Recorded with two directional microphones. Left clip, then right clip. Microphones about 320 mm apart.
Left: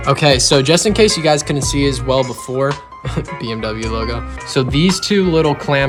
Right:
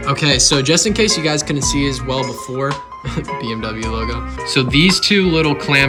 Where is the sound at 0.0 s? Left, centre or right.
Centre.